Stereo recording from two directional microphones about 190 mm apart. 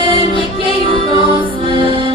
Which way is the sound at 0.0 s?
25° left (ahead or behind).